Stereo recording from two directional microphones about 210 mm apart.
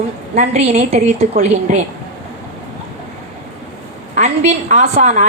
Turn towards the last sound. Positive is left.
turn(degrees=-35)  # may be behind; listen again after turning